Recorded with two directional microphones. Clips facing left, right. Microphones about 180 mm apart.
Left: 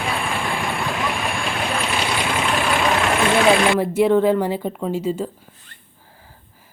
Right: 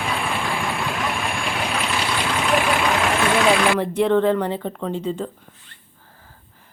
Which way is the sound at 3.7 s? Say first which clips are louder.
Left 2 dB; 5° left (ahead or behind).